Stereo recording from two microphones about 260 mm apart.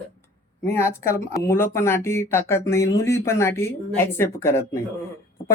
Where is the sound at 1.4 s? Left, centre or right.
Centre.